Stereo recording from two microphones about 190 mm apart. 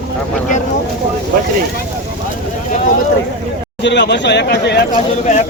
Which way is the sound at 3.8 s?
65° left (ahead or behind).